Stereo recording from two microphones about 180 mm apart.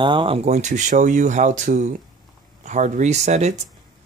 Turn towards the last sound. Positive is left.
turn(degrees=-40)  # may be behind; listen again after turning